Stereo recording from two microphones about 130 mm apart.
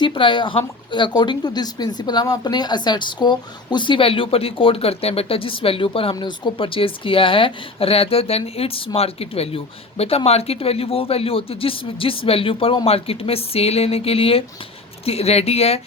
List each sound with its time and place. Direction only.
0.0 s speech: 40° left (ahead or behind)